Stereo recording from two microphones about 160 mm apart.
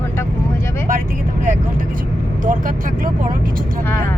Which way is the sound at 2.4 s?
55° right (ahead or behind).